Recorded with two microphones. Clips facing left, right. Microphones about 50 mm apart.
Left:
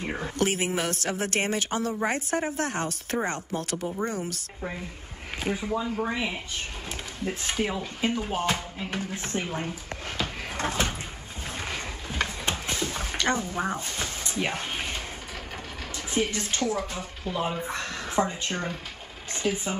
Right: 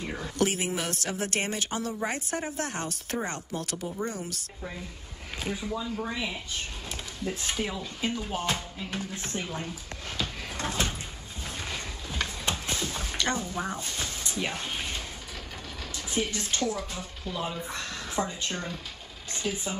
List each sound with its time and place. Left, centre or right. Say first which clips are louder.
0.0 s speech: left 1 dB; left
5.4 s speech: left 4 dB; left
7.2 s speech: left 3 dB; left
11.6 s a sound: left 3 dB; left
16.1 s speech: left 3 dB; left